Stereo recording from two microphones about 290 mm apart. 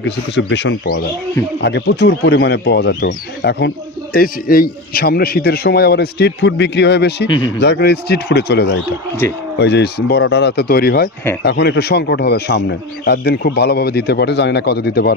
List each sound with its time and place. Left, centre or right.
0.0 s speech: left
7.2 s speech: centre
7.6 s speech: left